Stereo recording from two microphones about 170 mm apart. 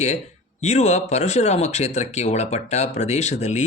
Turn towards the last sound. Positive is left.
turn(degrees=40)  # may be behind; listen again after turning